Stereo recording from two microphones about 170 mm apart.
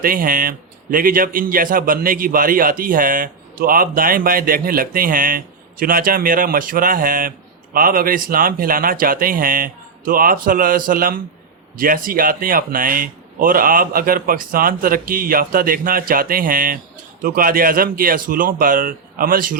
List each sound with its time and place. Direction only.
0.0 s speech: 55° right (ahead or behind)